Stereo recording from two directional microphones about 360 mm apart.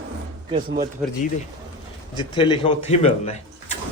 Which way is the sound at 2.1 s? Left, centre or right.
Centre.